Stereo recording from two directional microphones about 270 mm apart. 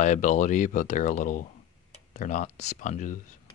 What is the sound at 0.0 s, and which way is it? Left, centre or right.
Speech, left.